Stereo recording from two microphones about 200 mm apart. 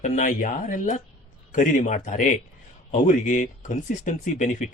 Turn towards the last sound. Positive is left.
turn(degrees=40)  # may be behind; listen again after turning